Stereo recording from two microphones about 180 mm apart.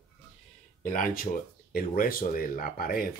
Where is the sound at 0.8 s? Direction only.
50° left (ahead or behind).